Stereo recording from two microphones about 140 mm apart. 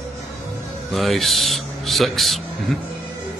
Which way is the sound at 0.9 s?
Centre (ahead or behind).